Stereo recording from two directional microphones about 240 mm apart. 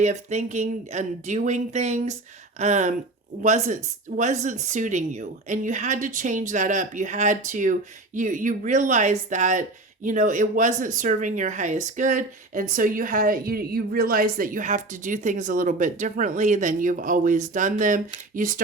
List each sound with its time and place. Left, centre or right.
0.0 s speech: right